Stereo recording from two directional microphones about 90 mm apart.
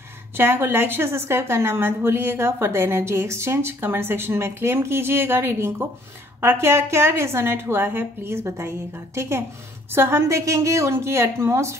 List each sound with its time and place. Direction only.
0.4 s a woman's voice: 25° right (ahead or behind)